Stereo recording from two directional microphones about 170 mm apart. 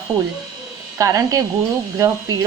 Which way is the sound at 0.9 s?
20° right (ahead or behind).